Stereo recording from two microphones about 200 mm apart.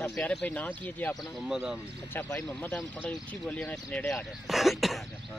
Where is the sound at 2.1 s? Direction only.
10° left (ahead or behind).